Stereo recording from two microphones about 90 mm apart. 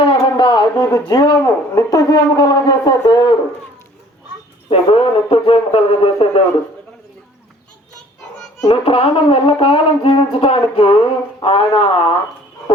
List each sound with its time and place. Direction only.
0.0 s a sound: 80° left; by 1.5 s 45° left (ahead or behind)
1.7 s speech: 40° left (ahead or behind)
4.7 s speech: 90° left
8.7 s speech: 90° left